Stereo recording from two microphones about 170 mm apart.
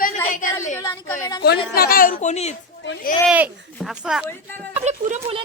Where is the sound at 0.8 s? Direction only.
15° left (ahead or behind).